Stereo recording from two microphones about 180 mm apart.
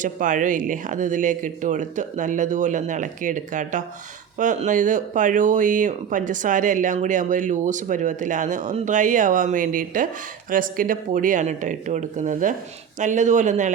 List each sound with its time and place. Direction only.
0.0 s speech: 45° right (ahead or behind)